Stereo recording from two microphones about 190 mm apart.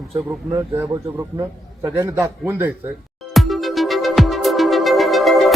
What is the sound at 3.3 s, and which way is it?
Music, centre (ahead or behind).